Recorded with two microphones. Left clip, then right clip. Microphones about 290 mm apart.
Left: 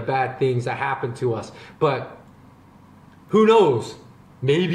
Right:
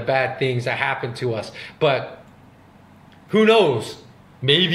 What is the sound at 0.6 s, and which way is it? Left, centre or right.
Speech, centre.